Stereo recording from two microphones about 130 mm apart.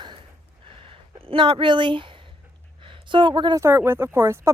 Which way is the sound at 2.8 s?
40° right (ahead or behind).